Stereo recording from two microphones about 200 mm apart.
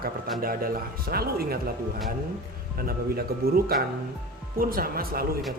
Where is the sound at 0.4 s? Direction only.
50° right (ahead or behind).